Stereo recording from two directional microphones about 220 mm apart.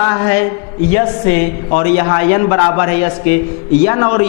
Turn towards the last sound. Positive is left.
turn(degrees=15)  # may be behind; listen again after turning